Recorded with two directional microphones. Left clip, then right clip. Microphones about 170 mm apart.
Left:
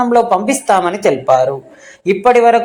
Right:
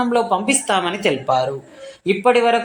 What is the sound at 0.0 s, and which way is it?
Speech, 20° left (ahead or behind).